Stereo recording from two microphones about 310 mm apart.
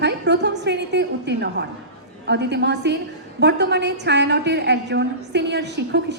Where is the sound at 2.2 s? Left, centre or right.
Right.